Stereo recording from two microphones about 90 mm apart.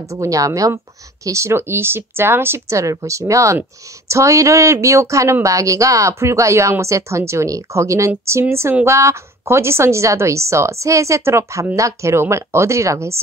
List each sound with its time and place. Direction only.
0.1 s a woman's voice: 40° right (ahead or behind)